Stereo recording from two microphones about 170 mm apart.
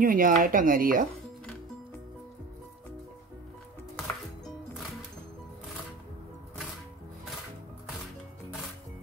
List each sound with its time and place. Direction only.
0.0 s speech: 55° right (ahead or behind)